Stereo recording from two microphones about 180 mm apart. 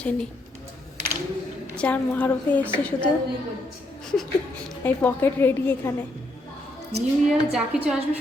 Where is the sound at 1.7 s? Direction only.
5° left (ahead or behind).